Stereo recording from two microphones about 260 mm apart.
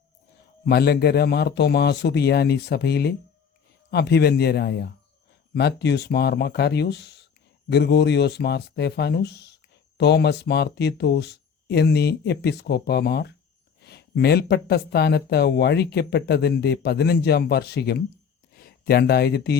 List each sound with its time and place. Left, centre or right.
0.6 s speech: left